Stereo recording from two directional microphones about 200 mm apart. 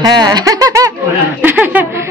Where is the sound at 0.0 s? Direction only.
20° right (ahead or behind).